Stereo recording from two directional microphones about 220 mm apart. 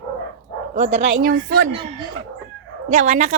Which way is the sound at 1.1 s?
40° right (ahead or behind).